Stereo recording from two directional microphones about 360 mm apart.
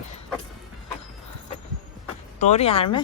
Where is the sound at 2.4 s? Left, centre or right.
Centre.